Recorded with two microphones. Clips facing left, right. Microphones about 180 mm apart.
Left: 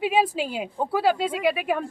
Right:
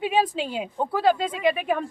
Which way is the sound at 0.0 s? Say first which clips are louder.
Left 1 dB; 5° left (ahead or behind).